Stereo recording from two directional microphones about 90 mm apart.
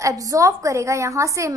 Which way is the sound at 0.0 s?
40° right (ahead or behind).